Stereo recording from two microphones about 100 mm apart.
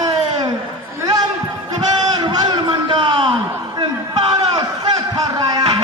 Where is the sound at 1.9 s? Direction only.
45° right (ahead or behind).